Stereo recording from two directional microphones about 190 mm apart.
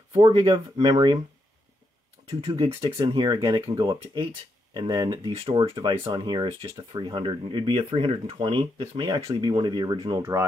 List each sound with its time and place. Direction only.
0.1 s speech: 25° right (ahead or behind)
2.4 s speech: 25° right (ahead or behind)